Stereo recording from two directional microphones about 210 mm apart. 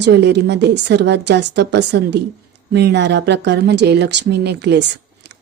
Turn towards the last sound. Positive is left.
turn(degrees=-55)  # may be behind; listen again after turning